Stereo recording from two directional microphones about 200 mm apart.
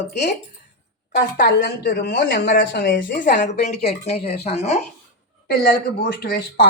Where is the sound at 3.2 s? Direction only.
40° left (ahead or behind).